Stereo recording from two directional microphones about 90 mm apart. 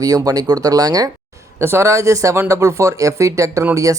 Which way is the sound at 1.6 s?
30° right (ahead or behind).